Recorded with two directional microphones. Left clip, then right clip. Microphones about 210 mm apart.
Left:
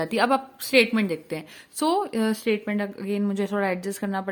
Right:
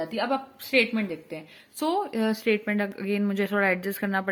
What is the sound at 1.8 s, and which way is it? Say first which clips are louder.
Speech: left 3 dB; 15° left (ahead or behind).